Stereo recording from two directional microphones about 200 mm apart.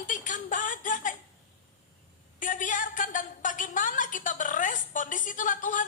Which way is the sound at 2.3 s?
40° left (ahead or behind).